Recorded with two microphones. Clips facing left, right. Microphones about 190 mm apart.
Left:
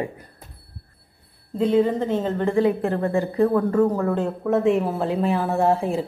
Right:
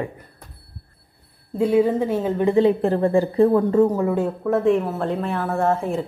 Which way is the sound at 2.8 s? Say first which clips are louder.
Right 4 dB; 30° right (ahead or behind).